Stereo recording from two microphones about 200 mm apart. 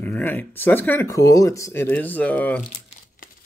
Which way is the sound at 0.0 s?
10° left (ahead or behind).